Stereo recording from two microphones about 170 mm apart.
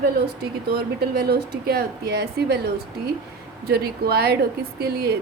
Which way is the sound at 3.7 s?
65° right (ahead or behind).